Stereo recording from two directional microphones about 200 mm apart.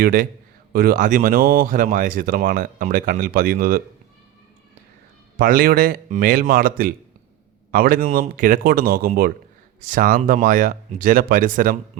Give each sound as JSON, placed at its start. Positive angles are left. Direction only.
{"t": 0.0, "sound": "speech", "side_deg": -45}
{"t": 5.4, "sound": "speech", "side_deg": -45}